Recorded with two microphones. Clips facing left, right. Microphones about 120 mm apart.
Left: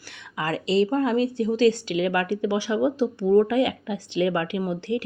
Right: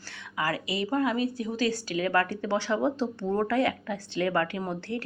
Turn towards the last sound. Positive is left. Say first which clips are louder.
# left 6 dB
turn(degrees=15)  # may be behind; listen again after turning